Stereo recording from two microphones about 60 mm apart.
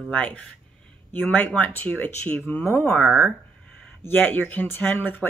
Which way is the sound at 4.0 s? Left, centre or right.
Left.